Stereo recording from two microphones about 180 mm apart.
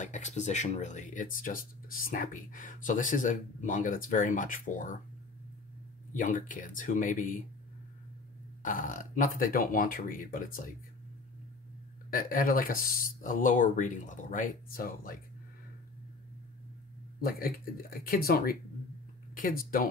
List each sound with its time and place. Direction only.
0.0 s speech: 40° left (ahead or behind)
6.1 s speech: 45° left (ahead or behind)
8.6 s speech: 50° left (ahead or behind)
12.1 s speech: 50° left (ahead or behind)
17.2 s speech: 55° left (ahead or behind)